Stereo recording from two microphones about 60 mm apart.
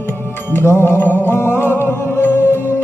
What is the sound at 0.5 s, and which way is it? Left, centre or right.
Music, left.